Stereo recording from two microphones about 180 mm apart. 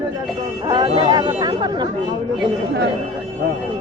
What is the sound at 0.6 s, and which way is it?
Speech, 25° right (ahead or behind).